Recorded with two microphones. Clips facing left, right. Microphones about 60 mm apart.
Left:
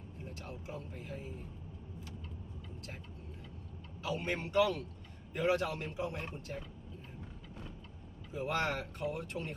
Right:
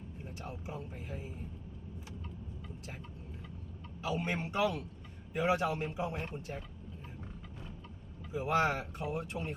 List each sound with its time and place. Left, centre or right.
0.3 s speech: centre
4.2 s speech: centre
6.1 s speech: centre
8.3 s speech: centre